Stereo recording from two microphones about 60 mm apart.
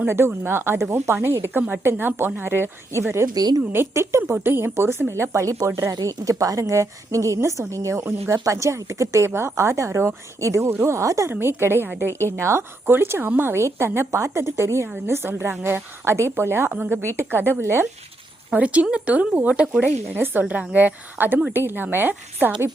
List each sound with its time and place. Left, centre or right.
0.4 s a woman's voice: right
4.4 s a woman's voice: right
9.3 s a woman's voice: right
10.7 s speech: right
11.0 s a woman's voice: right
11.3 s a woman's voice: right
12.8 s a woman's voice: right
18.5 s speech: right
19.8 s a woman's voice: right
20.4 s a woman's voice: right